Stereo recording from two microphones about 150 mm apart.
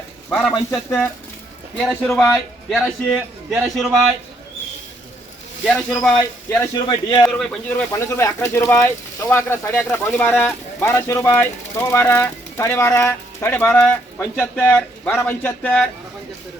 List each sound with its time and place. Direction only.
0.3 s a man's voice: 5° left (ahead or behind)
1.8 s a man's voice: 5° left (ahead or behind)
6.1 s speech: 20° left (ahead or behind)
6.7 s speech: 30° left (ahead or behind)
7.3 s speech: 5° left (ahead or behind)